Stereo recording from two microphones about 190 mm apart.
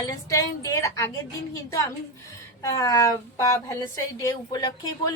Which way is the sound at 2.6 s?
15° left (ahead or behind).